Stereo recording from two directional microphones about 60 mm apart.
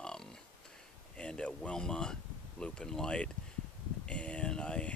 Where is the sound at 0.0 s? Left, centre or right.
Centre.